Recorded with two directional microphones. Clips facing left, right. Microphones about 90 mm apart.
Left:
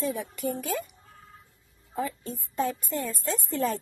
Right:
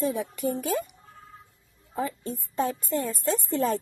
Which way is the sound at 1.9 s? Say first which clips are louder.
Right 1 dB; 30° right (ahead or behind).